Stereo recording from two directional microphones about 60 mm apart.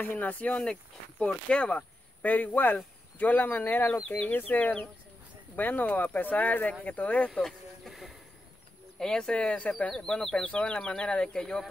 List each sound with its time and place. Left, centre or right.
0.0 s speech: left
7.4 s a sound: centre
9.0 s speech: centre